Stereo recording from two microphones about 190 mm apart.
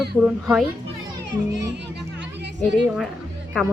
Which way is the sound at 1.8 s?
65° right (ahead or behind).